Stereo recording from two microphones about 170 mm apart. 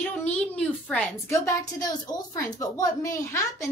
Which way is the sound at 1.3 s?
20° left (ahead or behind).